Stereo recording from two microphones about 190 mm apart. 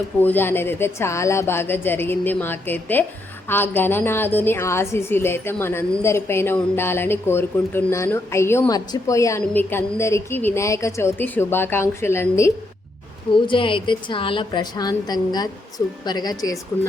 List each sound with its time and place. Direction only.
0.2 s a woman's voice: 10° left (ahead or behind)
13.3 s a woman's voice: 25° left (ahead or behind)